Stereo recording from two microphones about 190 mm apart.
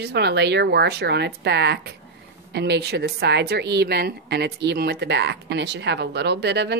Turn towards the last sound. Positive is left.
turn(degrees=-60)  # may be behind; listen again after turning